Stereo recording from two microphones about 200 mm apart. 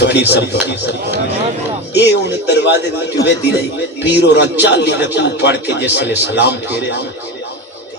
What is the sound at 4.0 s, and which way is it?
Speech, 55° left (ahead or behind).